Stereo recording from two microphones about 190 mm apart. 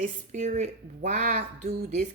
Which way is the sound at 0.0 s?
40° right (ahead or behind).